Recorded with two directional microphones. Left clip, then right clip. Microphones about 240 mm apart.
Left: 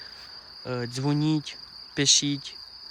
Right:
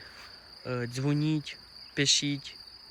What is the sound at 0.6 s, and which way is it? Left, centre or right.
Cricket, centre.